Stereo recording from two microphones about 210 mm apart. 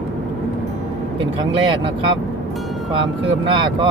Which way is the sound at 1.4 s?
25° right (ahead or behind).